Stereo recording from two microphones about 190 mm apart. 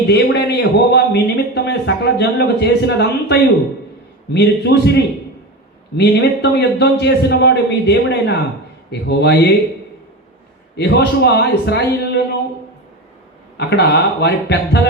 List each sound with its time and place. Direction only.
0.1 s a man's voice: 65° left (ahead or behind)
6.0 s a man's voice: 65° left (ahead or behind)
10.8 s a man's voice: 60° left (ahead or behind)
13.6 s a man's voice: 60° left (ahead or behind)